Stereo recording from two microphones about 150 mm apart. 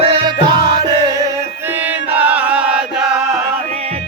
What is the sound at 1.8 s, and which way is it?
Chant, 10° right (ahead or behind).